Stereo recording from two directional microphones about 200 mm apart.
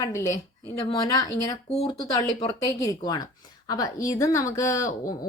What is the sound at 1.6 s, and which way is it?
Speech, 30° left (ahead or behind).